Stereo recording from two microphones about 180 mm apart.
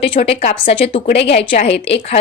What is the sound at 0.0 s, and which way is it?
A woman's voice, 30° left (ahead or behind).